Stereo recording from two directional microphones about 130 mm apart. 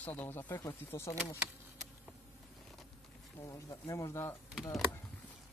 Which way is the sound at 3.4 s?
25° left (ahead or behind).